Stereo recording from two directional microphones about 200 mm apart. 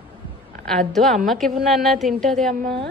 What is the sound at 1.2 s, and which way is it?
A woman's voice, centre (ahead or behind).